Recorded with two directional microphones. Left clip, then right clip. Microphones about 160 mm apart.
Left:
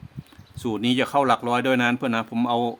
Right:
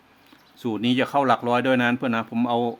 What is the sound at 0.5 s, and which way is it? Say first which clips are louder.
Speech: even; 5° left (ahead or behind).